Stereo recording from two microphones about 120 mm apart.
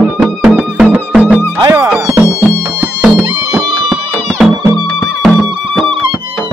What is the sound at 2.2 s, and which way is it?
Music, 20° left (ahead or behind).